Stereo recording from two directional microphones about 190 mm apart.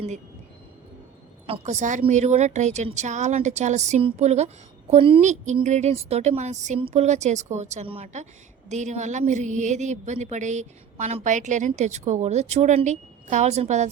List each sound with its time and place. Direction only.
1.5 s a woman's voice: 35° right (ahead or behind)